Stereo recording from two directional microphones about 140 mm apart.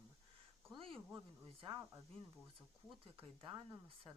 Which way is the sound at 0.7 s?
40° right (ahead or behind).